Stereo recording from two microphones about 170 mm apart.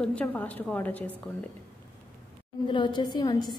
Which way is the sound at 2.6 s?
25° left (ahead or behind).